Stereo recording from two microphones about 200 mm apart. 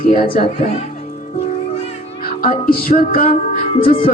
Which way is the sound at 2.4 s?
45° left (ahead or behind).